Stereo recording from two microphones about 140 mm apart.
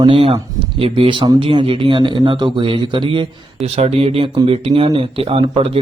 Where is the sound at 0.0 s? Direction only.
40° right (ahead or behind).